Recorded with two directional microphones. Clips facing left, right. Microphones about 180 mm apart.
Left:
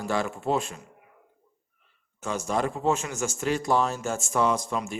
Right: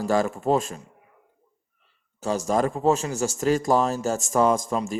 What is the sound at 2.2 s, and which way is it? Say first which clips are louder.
Speech: right 4 dB; 40° right (ahead or behind).